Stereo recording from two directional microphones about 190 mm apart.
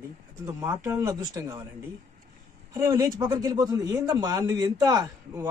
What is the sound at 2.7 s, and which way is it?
Speech, 15° right (ahead or behind).